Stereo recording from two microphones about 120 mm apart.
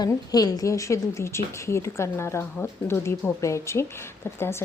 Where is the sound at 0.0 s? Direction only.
35° left (ahead or behind).